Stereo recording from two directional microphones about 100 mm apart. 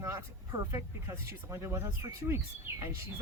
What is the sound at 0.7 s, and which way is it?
Speech, 30° right (ahead or behind).